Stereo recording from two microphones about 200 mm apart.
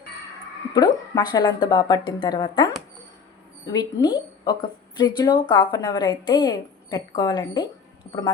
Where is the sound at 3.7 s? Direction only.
20° left (ahead or behind).